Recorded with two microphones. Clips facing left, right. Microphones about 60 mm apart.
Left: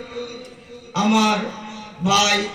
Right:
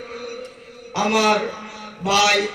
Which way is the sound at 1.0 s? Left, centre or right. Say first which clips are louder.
Even; right.